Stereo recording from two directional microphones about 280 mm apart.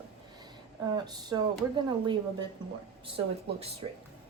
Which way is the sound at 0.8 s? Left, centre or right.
Centre.